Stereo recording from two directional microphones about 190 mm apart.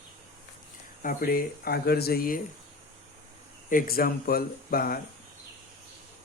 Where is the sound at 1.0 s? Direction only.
50° left (ahead or behind).